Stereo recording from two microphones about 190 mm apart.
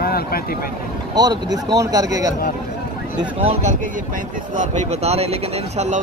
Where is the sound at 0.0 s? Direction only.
50° left (ahead or behind).